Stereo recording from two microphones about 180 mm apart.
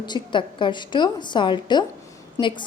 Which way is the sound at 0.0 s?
25° left (ahead or behind).